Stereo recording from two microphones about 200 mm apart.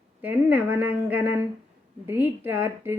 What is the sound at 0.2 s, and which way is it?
Speech, 10° right (ahead or behind).